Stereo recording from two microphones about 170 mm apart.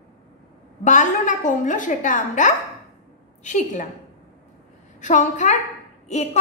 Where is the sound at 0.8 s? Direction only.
45° left (ahead or behind).